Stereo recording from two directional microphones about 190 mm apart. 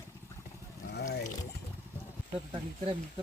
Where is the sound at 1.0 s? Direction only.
45° left (ahead or behind).